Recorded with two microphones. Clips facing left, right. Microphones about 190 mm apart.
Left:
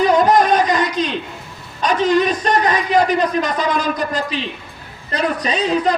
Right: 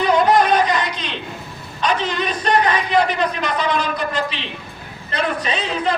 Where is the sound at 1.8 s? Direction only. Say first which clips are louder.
Left 6 dB; 45° left (ahead or behind).